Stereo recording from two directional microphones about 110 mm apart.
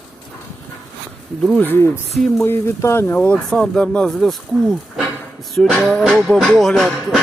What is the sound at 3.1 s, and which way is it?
Music, 10° left (ahead or behind).